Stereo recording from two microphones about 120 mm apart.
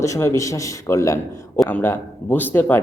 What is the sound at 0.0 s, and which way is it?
A man's voice, 25° left (ahead or behind).